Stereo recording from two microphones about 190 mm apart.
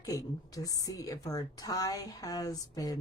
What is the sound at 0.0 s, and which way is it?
A woman's voice, 15° left (ahead or behind).